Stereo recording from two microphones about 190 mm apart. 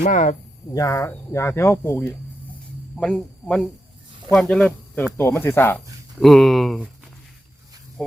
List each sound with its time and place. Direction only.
0.0 s speech: 40° left (ahead or behind)
0.7 s speech: 15° left (ahead or behind); by 6.9 s centre (ahead or behind)